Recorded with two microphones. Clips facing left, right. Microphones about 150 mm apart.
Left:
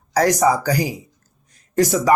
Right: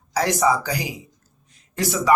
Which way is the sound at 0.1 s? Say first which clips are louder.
Left 4 dB; 45° left (ahead or behind).